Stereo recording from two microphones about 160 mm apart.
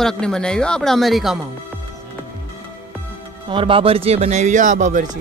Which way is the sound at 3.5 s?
30° right (ahead or behind).